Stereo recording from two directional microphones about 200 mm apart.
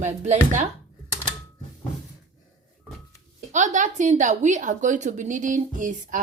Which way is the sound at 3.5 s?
40° right (ahead or behind).